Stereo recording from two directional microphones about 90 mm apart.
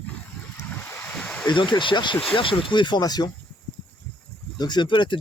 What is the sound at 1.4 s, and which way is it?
Speech, 60° left (ahead or behind).